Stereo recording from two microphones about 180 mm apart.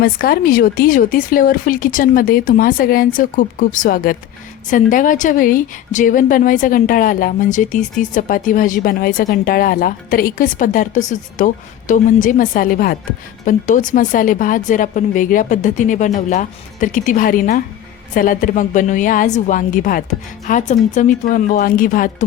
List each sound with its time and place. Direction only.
0.0 s a woman's voice: 55° left (ahead or behind)